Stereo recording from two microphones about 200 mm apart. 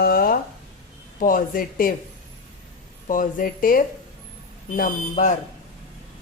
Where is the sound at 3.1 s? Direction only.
40° left (ahead or behind).